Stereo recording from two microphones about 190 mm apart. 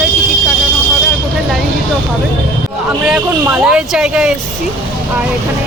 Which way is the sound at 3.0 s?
5° right (ahead or behind).